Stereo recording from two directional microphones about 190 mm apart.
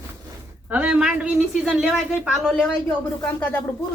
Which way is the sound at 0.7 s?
10° right (ahead or behind).